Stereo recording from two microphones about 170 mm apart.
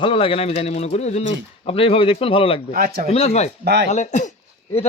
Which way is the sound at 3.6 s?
75° right (ahead or behind).